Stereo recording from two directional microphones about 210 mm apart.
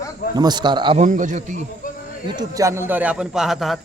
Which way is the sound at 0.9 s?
35° right (ahead or behind).